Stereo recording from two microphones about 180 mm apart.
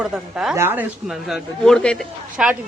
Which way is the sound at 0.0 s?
5° right (ahead or behind).